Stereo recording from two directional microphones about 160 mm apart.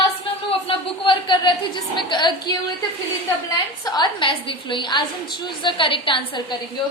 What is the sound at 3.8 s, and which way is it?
A woman's voice, 30° left (ahead or behind).